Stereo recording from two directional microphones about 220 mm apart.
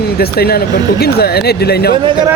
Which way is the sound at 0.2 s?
45° left (ahead or behind).